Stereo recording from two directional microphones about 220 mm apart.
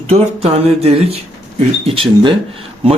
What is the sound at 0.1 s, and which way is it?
Speech, 25° right (ahead or behind).